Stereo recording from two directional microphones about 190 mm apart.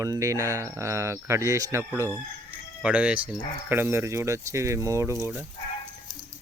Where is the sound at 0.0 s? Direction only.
15° right (ahead or behind).